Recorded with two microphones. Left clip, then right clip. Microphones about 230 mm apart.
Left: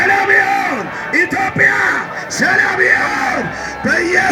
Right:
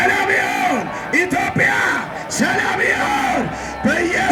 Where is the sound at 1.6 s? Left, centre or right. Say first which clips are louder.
Left 5 dB; right.